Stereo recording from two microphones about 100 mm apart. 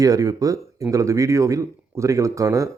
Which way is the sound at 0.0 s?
35° right (ahead or behind).